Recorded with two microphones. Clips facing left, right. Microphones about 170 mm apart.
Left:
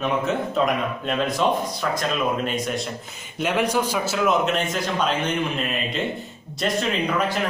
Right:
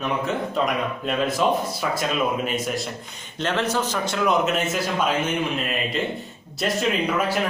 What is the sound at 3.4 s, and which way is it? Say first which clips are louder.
A man's voice: left 2 dB; 10° left (ahead or behind).